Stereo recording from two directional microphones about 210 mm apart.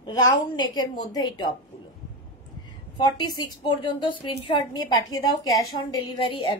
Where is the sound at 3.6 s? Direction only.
20° left (ahead or behind).